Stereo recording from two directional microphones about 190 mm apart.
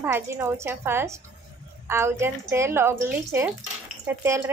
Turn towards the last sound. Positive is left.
turn(degrees=-15)  # may be behind; listen again after turning